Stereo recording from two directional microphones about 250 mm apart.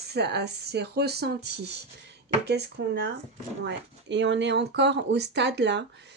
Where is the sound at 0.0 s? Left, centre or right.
Right.